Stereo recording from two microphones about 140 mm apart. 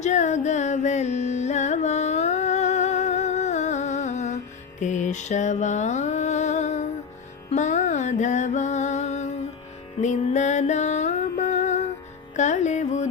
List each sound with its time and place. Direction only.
0.0 s music: 60° left (ahead or behind)
4.8 s mantra: 60° left (ahead or behind)
7.5 s music: 60° left (ahead or behind)